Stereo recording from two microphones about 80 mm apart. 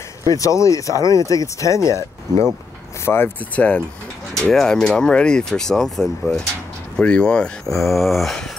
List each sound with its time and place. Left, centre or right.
0.3 s speech: left
3.1 s speech: centre
7.0 s speech: centre
7.9 s speech: centre